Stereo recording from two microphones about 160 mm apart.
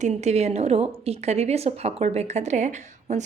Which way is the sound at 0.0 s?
45° right (ahead or behind).